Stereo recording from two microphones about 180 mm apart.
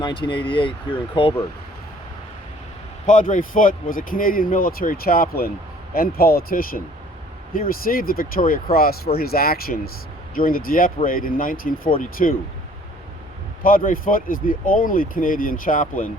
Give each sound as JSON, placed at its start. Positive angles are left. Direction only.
{"t": 0.0, "sound": "speech", "side_deg": 25}
{"t": 3.1, "sound": "speech", "side_deg": 45}
{"t": 13.6, "sound": "speech", "side_deg": 50}